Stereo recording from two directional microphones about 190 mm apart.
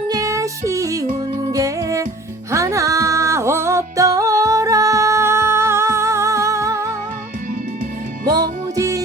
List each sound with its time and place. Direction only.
0.1 s music: 15° right (ahead or behind)
8.3 s music: 20° right (ahead or behind)